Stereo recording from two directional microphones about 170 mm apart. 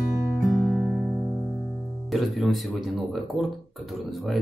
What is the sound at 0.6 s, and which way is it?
Speech, centre (ahead or behind).